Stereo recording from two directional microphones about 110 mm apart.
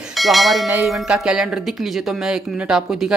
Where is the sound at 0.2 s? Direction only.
Centre (ahead or behind).